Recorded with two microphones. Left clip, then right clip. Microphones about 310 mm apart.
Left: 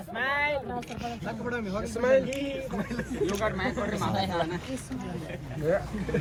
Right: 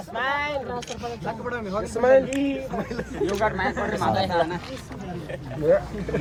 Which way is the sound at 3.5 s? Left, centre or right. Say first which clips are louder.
Right 5 dB; centre.